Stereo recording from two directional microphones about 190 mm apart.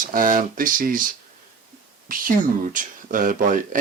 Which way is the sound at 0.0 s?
45° right (ahead or behind).